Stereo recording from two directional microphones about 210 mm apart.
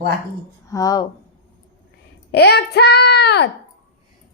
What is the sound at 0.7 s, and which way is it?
Speech, 15° left (ahead or behind).